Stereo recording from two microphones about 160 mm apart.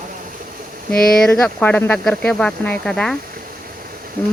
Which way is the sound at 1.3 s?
10° left (ahead or behind).